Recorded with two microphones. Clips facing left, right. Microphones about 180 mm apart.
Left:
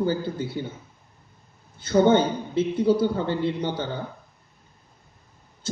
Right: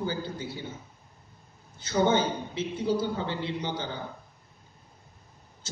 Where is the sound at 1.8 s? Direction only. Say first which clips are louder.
Left 6 dB; 55° left (ahead or behind).